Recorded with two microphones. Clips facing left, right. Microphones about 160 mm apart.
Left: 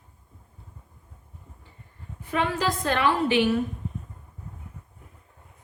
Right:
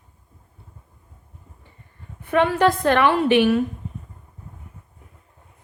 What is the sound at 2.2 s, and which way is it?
A woman's voice, 60° right (ahead or behind).